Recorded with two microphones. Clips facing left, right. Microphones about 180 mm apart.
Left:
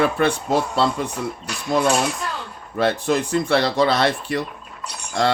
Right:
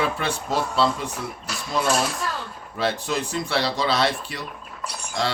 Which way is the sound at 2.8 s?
55° left (ahead or behind).